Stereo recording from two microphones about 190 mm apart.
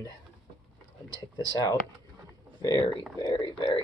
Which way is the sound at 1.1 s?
20° left (ahead or behind).